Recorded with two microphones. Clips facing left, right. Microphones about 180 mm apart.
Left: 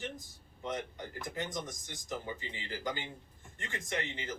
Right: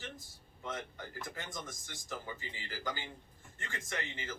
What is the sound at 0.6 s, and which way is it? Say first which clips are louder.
Speech: left 4 dB; 20° left (ahead or behind).